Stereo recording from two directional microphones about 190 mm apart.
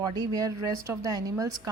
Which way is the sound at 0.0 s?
20° right (ahead or behind).